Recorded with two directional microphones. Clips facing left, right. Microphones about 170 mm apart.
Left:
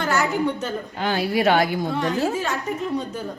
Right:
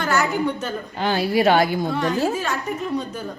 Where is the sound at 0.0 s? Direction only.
25° left (ahead or behind).